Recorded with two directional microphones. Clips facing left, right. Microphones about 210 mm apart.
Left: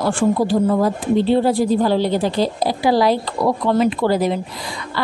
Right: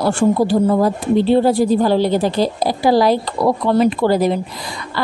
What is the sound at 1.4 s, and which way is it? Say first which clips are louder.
Speech: right 2 dB; 45° right (ahead or behind).